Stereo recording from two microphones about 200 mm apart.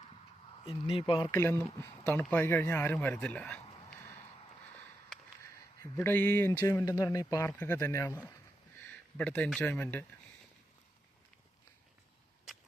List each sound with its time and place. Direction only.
0.9 s speech: 25° left (ahead or behind)
1.3 s speech: 10° left (ahead or behind)
5.8 s speech: 10° left (ahead or behind)